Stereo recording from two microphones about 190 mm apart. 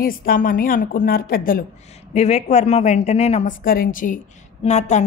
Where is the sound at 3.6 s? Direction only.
50° left (ahead or behind).